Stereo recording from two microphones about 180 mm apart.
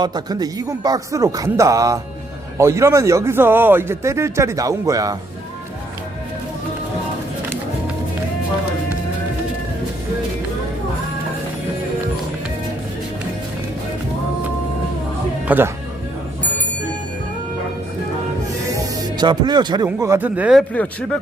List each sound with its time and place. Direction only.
0.0 s a man's voice: 25° right (ahead or behind)
15.4 s speech: 10° right (ahead or behind)
18.7 s speech: 20° right (ahead or behind); by 21.2 s centre (ahead or behind)